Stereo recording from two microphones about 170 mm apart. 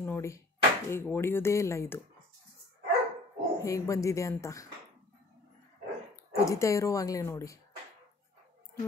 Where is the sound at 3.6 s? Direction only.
20° left (ahead or behind).